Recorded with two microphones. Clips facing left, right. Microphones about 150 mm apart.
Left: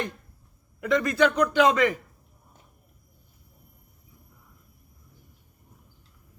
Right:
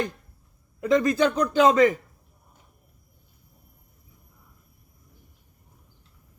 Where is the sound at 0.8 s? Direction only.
30° right (ahead or behind).